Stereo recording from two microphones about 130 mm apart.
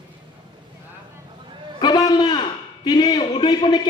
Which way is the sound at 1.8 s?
30° left (ahead or behind).